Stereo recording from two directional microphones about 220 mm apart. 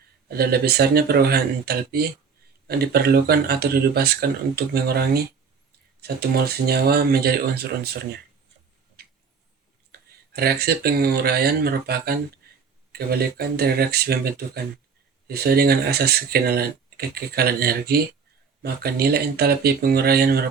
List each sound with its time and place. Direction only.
0.3 s speech: 45° right (ahead or behind)
9.9 s clicking: 45° right (ahead or behind)
10.3 s speech: 45° right (ahead or behind)